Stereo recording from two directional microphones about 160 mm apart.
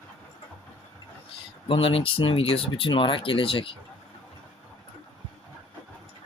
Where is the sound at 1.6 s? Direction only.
35° left (ahead or behind).